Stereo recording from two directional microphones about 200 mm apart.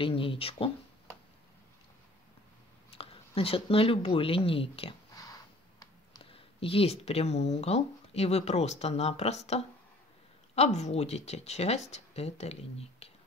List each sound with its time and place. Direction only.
0.0 s speech: 25° left (ahead or behind)
2.9 s speech: 30° left (ahead or behind)
5.1 s speech: 15° left (ahead or behind)